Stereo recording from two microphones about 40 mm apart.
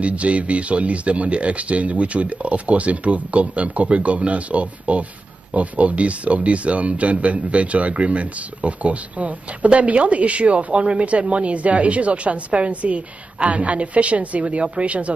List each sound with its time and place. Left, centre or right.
0.0 s speech: right